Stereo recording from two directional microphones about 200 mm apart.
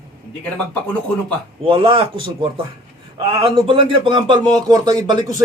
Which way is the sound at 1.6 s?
25° right (ahead or behind).